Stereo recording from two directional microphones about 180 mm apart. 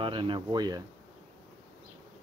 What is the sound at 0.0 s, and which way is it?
Speech, 30° right (ahead or behind).